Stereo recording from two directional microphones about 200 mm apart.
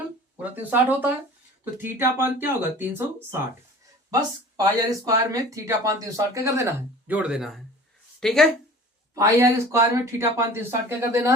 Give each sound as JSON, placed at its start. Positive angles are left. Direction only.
{"t": 0.3, "sound": "speech", "side_deg": -10}
{"t": 9.1, "sound": "speech", "side_deg": -15}